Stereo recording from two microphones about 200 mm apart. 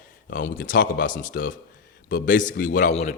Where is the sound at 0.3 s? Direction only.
40° left (ahead or behind).